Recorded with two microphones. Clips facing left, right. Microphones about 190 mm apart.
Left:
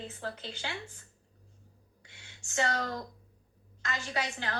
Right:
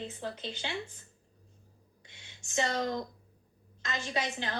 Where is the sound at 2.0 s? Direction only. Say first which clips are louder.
Even; 20° right (ahead or behind).